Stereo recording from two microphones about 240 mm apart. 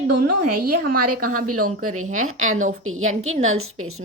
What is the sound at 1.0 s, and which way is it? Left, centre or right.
A woman's voice, right.